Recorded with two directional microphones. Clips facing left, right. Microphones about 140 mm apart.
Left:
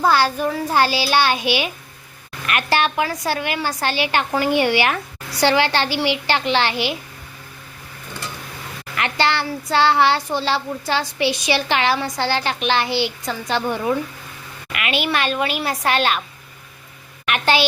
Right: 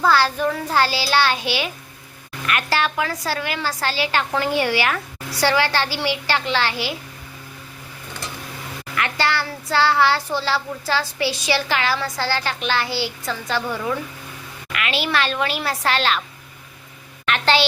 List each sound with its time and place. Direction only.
0.0 s a child's voice: 15° left (ahead or behind)
9.0 s a child's voice: 25° left (ahead or behind)
17.2 s a child's voice: 10° left (ahead or behind)